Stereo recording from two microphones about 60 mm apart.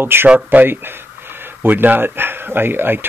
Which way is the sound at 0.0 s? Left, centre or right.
Right.